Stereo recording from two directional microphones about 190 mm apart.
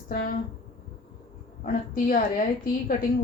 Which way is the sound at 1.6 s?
45° left (ahead or behind).